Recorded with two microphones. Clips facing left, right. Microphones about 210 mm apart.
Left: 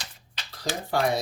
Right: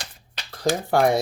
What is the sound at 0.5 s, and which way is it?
Speech, 50° right (ahead or behind).